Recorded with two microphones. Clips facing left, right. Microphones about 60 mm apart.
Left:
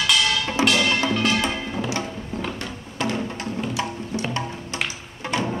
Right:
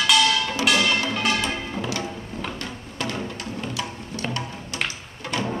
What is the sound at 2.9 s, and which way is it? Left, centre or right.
Music, left.